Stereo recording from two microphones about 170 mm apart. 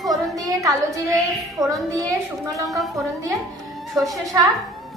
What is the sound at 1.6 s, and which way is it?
Speech, 20° right (ahead or behind).